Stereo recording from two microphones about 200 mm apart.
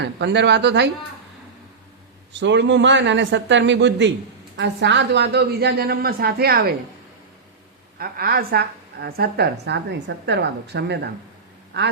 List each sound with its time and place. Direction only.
0.0 s a man's voice: 60° right (ahead or behind)
2.3 s a man's voice: 60° right (ahead or behind)
7.9 s a woman's voice: 50° right (ahead or behind)